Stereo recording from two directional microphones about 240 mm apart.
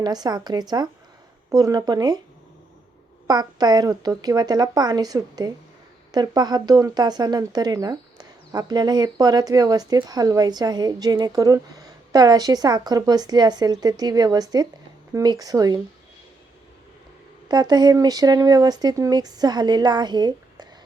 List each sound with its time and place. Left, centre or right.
0.0 s speech: centre
3.2 s speech: centre
17.5 s speech: centre